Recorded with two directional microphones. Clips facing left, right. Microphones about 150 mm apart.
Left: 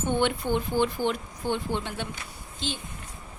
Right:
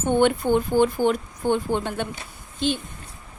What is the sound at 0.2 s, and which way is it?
A woman's voice, 45° right (ahead or behind).